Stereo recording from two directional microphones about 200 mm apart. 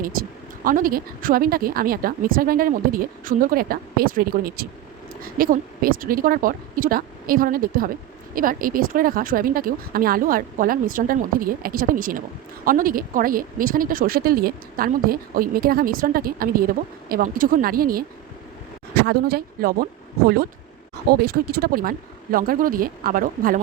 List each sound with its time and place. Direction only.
0.0 s speech: 45° right (ahead or behind)